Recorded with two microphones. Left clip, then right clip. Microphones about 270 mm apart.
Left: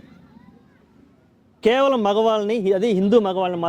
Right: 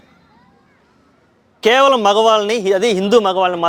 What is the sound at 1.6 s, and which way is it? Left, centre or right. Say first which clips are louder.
A man's voice: right 6 dB; right.